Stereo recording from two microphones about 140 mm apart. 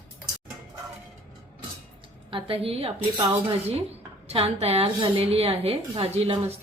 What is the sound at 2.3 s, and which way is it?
A woman's voice, 40° right (ahead or behind).